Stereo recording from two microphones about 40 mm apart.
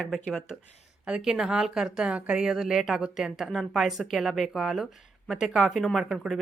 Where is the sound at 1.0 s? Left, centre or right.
Centre.